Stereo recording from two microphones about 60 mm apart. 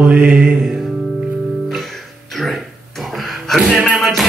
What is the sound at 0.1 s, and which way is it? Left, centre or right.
Mantra, right.